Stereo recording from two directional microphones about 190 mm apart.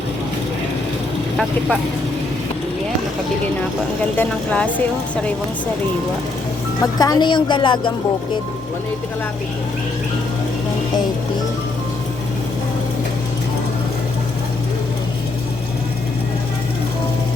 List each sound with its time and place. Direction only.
4.2 s speech: 5° left (ahead or behind)
7.0 s a woman's voice: 20° left (ahead or behind)